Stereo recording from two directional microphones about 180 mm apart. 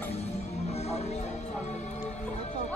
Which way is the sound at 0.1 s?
35° left (ahead or behind).